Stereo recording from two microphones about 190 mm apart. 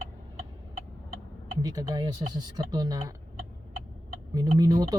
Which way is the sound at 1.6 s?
20° right (ahead or behind).